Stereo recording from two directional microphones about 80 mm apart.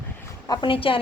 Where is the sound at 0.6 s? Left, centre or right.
Left.